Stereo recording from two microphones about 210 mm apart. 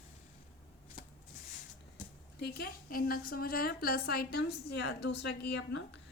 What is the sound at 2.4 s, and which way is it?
A woman's voice, 45° left (ahead or behind).